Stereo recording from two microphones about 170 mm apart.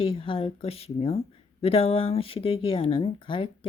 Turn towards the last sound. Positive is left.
turn(degrees=30)  # may be behind; listen again after turning